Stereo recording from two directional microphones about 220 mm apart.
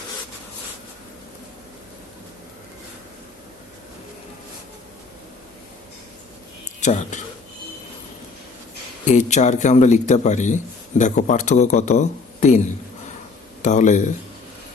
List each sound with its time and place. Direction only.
6.7 s speech: 35° left (ahead or behind)
9.0 s a man's voice: 30° left (ahead or behind)